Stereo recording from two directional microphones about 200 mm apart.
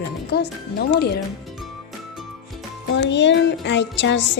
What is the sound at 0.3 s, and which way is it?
Music, 55° left (ahead or behind).